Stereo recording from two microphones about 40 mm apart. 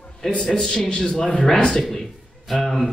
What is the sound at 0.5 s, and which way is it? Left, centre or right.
Speech, centre.